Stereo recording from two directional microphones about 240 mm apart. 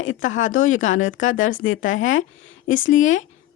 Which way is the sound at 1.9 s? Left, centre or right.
Left.